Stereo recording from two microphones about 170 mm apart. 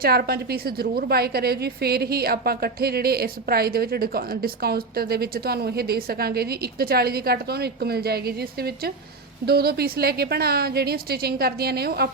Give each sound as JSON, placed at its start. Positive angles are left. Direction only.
{"t": 0.0, "sound": "a woman's voice", "side_deg": -65}
{"t": 9.5, "sound": "a woman's voice", "side_deg": -65}